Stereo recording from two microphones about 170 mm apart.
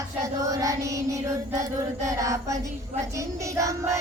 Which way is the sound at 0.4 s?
20° right (ahead or behind).